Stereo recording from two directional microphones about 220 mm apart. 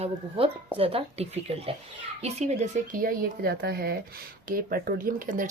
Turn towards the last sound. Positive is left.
turn(degrees=-40)  # may be behind; listen again after turning